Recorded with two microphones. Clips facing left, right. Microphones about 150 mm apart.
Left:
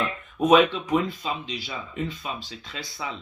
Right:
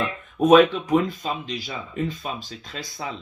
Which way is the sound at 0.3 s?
45° right (ahead or behind).